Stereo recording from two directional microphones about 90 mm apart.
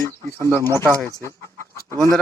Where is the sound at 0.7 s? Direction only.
35° right (ahead or behind).